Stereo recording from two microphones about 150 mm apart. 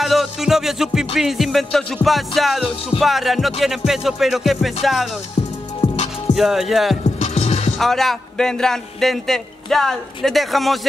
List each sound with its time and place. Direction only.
0.0 s music: centre (ahead or behind)
3.0 s a man's voice: centre (ahead or behind)
6.3 s a man's voice: centre (ahead or behind)
7.2 s music: 50° left (ahead or behind)
7.8 s a man's voice: centre (ahead or behind)